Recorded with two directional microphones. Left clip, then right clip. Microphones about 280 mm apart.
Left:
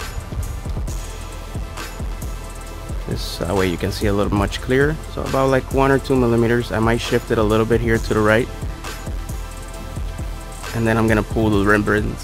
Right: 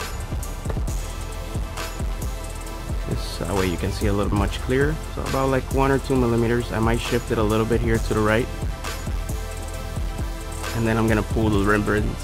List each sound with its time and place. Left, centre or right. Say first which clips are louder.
3.3 s music: left 6 dB; centre
3.8 s speech: left 4 dB; centre
10.8 s speech: left 4 dB; centre